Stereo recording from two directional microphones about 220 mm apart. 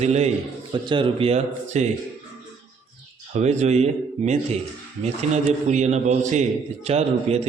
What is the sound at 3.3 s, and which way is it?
Speech, 30° right (ahead or behind).